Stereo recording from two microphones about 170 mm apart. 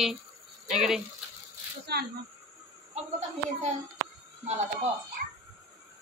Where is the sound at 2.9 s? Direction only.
40° right (ahead or behind).